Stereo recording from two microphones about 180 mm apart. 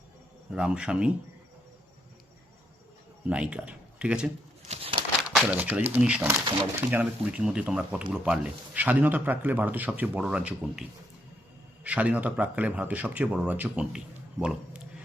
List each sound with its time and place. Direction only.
0.5 s speech: 5° right (ahead or behind)
3.2 s speech: 5° right (ahead or behind)
4.7 s crumpling: 30° right (ahead or behind)
5.3 s speech: 5° right (ahead or behind)